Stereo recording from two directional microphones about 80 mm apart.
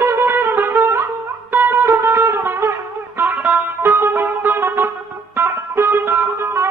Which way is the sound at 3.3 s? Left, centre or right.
Centre.